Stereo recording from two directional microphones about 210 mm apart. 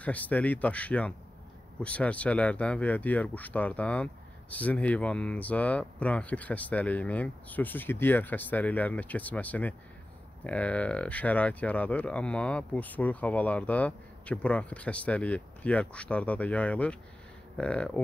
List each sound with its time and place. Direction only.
0.0 s speech: 5° left (ahead or behind)